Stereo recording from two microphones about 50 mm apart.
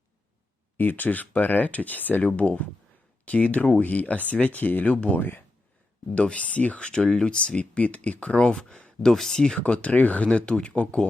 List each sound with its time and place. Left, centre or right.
0.8 s speech: left
6.1 s speech: left
9.0 s speech: centre
9.6 s speech: left